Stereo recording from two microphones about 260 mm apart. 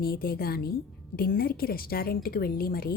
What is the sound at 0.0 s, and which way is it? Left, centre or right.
A woman's voice, left.